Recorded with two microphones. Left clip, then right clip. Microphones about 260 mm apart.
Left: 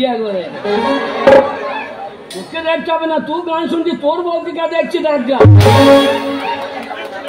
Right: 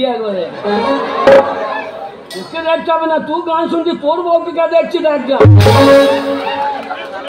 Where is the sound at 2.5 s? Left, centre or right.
Left.